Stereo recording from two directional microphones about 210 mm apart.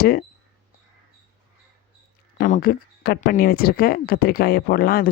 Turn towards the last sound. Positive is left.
turn(degrees=45)  # may be behind; listen again after turning